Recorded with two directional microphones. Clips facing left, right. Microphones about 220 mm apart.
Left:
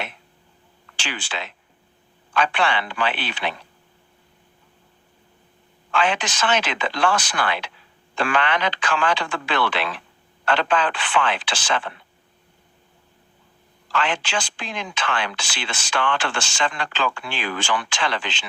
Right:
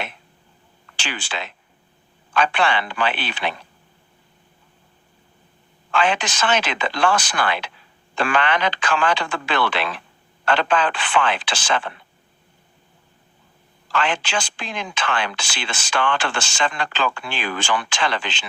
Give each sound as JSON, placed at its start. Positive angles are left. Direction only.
{"t": 0.9, "sound": "speech", "side_deg": -45}
{"t": 5.9, "sound": "speech", "side_deg": -45}
{"t": 13.9, "sound": "speech", "side_deg": -45}